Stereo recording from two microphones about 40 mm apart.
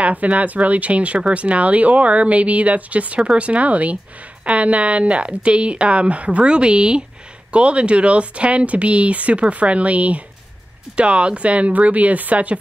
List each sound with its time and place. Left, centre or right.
0.0 s speech: right